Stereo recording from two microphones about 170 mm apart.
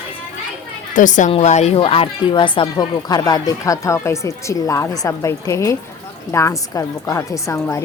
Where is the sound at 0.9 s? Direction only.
50° left (ahead or behind).